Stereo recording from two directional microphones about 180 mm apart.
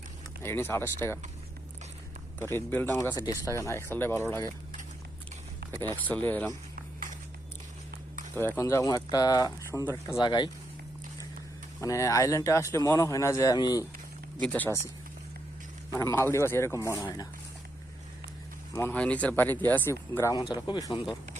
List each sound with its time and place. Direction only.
0.4 s speech: 15° left (ahead or behind)
2.6 s speech: 10° left (ahead or behind)
5.7 s speech: 25° right (ahead or behind)
6.1 s speech: 10° left (ahead or behind)
8.4 s speech: 15° left (ahead or behind)
11.8 s speech: 20° left (ahead or behind)
14.4 s speech: 10° left (ahead or behind)
15.9 s speech: 15° left (ahead or behind)
18.7 s speech: 10° left (ahead or behind)